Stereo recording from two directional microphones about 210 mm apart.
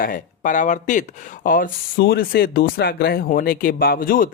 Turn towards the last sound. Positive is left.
turn(degrees=45)  # may be behind; listen again after turning